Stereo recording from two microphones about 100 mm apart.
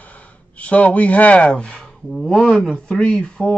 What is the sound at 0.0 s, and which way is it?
Speech, 15° left (ahead or behind).